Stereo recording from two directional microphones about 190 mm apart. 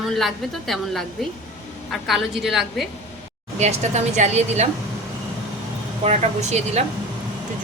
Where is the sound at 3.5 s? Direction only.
35° right (ahead or behind).